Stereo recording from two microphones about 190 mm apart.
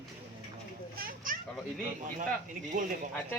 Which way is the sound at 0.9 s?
50° right (ahead or behind).